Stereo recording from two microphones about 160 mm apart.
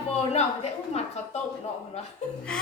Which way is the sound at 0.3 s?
45° left (ahead or behind).